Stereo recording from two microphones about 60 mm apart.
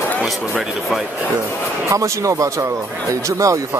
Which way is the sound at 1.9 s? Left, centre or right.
Right.